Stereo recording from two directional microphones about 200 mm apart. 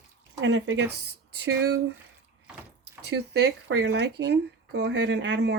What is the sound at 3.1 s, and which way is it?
Speech, 60° right (ahead or behind).